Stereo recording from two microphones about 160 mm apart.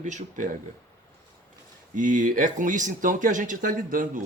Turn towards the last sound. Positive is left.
turn(degrees=-55)  # may be behind; listen again after turning